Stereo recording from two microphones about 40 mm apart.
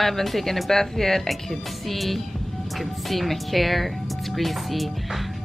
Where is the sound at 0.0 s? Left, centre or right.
Centre.